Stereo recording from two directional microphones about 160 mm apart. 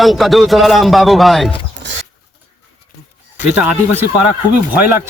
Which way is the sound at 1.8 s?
90° right.